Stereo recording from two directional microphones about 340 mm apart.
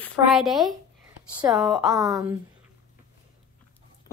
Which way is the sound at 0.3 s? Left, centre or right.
Centre.